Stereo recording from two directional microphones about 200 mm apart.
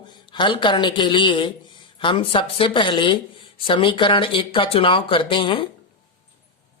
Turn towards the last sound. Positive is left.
turn(degrees=25)  # may be behind; listen again after turning